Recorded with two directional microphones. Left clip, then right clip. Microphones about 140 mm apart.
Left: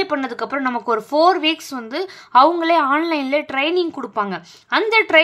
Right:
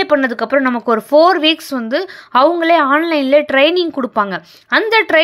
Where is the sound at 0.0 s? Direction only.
35° right (ahead or behind).